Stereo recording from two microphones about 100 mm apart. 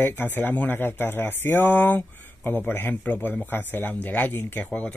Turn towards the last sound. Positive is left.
turn(degrees=15)  # may be behind; listen again after turning